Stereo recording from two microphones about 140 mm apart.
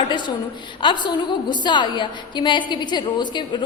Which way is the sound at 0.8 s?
35° left (ahead or behind).